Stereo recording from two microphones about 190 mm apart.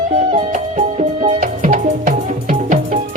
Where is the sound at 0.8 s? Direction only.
40° right (ahead or behind).